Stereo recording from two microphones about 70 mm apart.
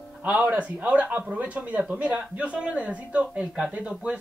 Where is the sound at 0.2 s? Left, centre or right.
Right.